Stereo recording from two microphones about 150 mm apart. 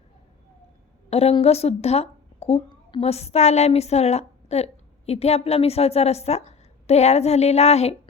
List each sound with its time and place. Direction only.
1.1 s a woman's voice: 45° left (ahead or behind)